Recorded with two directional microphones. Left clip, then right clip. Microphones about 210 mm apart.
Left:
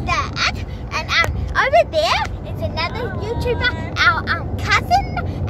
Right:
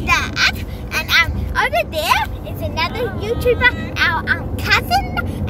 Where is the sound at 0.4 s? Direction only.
5° left (ahead or behind).